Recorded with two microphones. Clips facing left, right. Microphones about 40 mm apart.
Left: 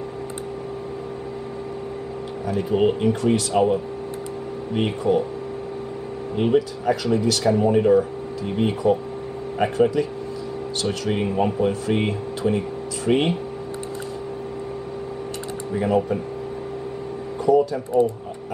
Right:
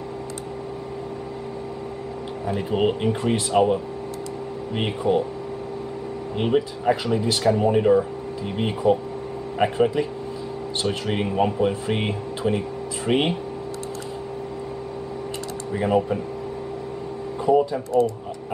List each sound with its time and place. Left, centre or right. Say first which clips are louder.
2.4 s speech: left 2 dB; centre
6.3 s speech: left 2 dB; centre
15.7 s speech: even; centre
17.4 s speech: left 1 dB; right